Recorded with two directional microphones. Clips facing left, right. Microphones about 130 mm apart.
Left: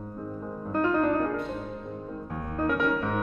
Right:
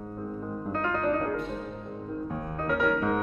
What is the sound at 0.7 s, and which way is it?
Music, 15° left (ahead or behind).